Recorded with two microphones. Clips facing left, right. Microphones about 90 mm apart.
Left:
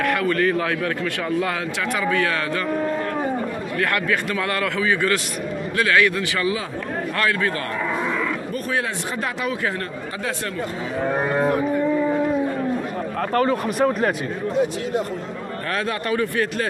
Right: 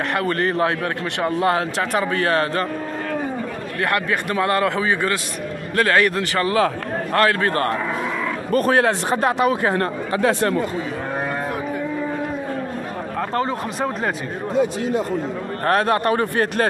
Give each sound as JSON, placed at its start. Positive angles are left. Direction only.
{"t": 0.0, "sound": "a man's voice", "side_deg": -25}
{"t": 0.3, "sound": "a man's voice", "side_deg": -35}
{"t": 1.2, "sound": "a man's voice", "side_deg": -45}
{"t": 3.8, "sound": "a man's voice", "side_deg": -25}
{"t": 7.2, "sound": "speech", "side_deg": -50}
{"t": 8.5, "sound": "speech", "side_deg": -65}
{"t": 10.1, "sound": "speech", "side_deg": -55}
{"t": 13.3, "sound": "speech", "side_deg": -25}
{"t": 15.6, "sound": "speech", "side_deg": -50}